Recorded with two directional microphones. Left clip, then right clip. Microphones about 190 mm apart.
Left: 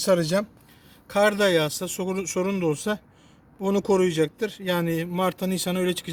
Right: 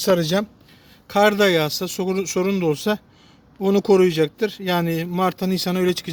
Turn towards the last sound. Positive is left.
turn(degrees=-35)  # may be behind; listen again after turning